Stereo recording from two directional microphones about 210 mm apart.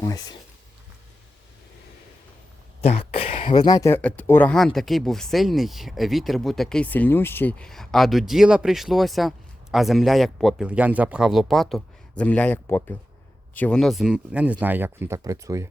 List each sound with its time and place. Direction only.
0.0 s speech: 15° left (ahead or behind)
2.8 s speech: 30° left (ahead or behind); by 15.7 s 15° right (ahead or behind)